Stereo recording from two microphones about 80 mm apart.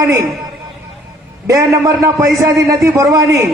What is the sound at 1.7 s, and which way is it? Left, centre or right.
A man's voice, right.